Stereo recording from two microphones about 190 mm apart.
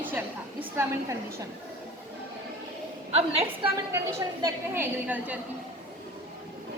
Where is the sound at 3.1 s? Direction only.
30° right (ahead or behind).